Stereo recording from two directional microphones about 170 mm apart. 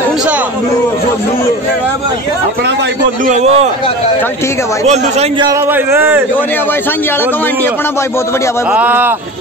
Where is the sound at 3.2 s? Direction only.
45° right (ahead or behind).